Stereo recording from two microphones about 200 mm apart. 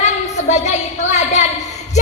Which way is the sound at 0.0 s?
35° left (ahead or behind).